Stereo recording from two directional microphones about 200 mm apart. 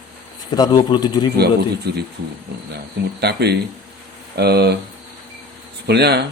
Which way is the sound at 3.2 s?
55° right (ahead or behind).